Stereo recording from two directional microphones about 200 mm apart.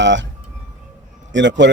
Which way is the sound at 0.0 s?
65° right (ahead or behind).